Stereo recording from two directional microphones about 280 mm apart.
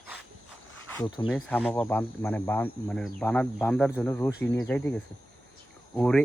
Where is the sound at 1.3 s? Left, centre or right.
Centre.